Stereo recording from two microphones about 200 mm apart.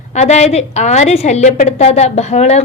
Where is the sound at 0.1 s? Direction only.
35° left (ahead or behind).